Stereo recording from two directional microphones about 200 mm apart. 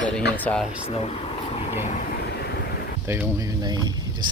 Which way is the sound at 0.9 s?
30° left (ahead or behind).